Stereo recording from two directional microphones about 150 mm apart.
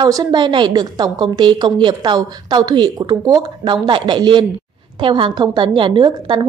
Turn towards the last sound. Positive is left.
turn(degrees=-30)  # may be behind; listen again after turning